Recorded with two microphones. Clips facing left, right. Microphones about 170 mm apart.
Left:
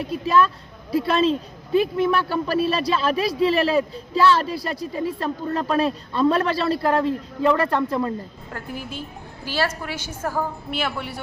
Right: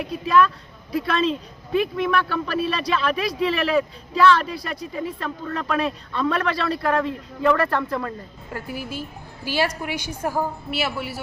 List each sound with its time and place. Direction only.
0.3 s a woman's voice: 30° left (ahead or behind)
8.5 s a woman's voice: 5° right (ahead or behind)